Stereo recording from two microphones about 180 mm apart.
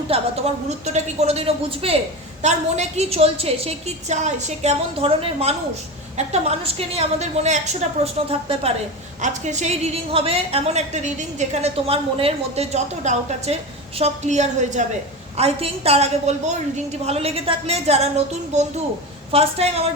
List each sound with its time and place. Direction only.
0.1 s a woman's voice: 35° right (ahead or behind)
19.3 s a woman's voice: 35° right (ahead or behind)